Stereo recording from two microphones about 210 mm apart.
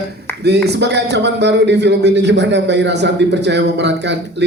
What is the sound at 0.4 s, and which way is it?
A man's voice, 50° right (ahead or behind).